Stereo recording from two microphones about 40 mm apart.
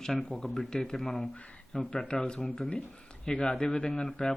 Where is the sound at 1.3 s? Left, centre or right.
Left; by 4.1 s centre.